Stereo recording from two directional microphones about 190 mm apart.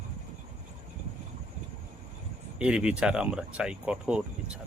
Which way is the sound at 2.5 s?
5° right (ahead or behind).